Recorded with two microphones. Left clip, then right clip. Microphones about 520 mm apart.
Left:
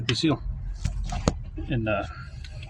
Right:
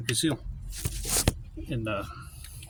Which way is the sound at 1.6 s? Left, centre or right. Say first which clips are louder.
Left 5 dB; right.